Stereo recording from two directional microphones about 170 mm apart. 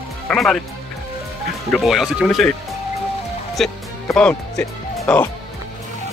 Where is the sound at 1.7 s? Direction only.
Centre (ahead or behind).